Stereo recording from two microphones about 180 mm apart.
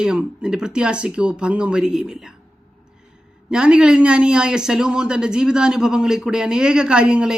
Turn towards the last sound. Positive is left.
turn(degrees=-5)  # may be behind; listen again after turning